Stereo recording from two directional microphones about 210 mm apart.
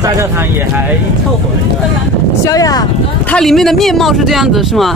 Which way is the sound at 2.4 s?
15° left (ahead or behind).